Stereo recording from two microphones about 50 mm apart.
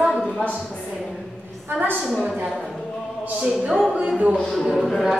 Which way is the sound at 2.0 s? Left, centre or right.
Centre.